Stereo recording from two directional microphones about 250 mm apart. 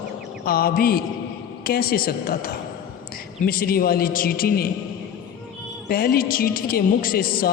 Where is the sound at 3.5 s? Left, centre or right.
Left.